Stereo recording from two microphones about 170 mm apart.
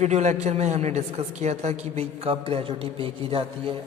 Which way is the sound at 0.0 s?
40° right (ahead or behind).